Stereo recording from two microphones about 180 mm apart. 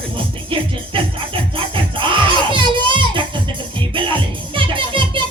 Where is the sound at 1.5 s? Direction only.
30° right (ahead or behind).